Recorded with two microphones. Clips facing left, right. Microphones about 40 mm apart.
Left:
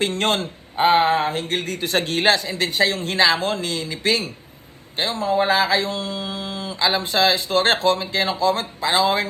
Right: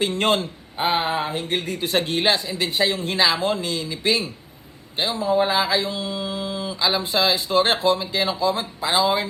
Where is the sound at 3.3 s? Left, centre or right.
Left.